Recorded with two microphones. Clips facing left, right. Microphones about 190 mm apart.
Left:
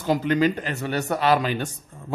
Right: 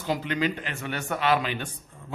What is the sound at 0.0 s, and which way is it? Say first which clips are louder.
A woman's voice: left 6 dB; 45° left (ahead or behind).